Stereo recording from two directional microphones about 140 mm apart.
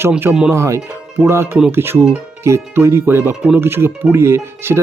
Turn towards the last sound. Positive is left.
turn(degrees=-15)  # may be behind; listen again after turning